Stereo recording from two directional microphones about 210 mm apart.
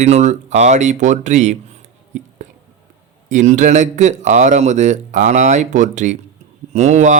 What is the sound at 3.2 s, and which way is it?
Speech, 35° right (ahead or behind).